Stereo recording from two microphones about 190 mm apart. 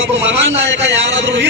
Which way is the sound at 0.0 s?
80° right.